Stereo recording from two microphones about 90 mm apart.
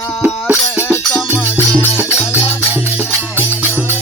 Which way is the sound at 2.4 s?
20° right (ahead or behind).